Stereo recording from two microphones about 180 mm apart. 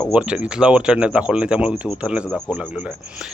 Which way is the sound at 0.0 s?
5° right (ahead or behind).